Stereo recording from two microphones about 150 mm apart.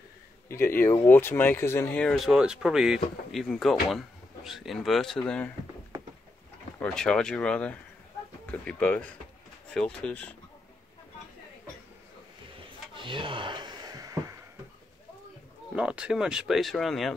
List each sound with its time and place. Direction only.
0.5 s speech: 15° left (ahead or behind)
6.8 s speech: 5° left (ahead or behind)
12.9 s wood: 35° right (ahead or behind)
15.7 s speech: 5° right (ahead or behind)